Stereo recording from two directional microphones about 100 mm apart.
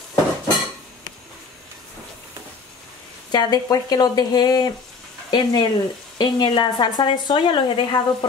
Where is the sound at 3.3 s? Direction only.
40° left (ahead or behind); by 7.8 s 60° left (ahead or behind).